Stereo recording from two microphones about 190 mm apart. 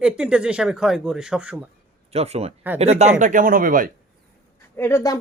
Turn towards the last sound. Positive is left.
turn(degrees=15)  # may be behind; listen again after turning